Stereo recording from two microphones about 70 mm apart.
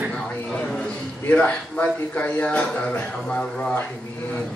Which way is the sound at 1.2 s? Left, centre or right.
Left.